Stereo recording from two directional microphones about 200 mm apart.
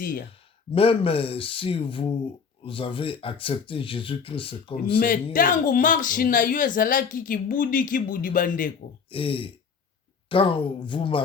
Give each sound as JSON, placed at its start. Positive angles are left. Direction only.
{"t": 0.0, "sound": "speech", "side_deg": 45}
{"t": 0.7, "sound": "speech", "side_deg": 30}
{"t": 4.9, "sound": "speech", "side_deg": 45}
{"t": 9.0, "sound": "a man's voice", "side_deg": 25}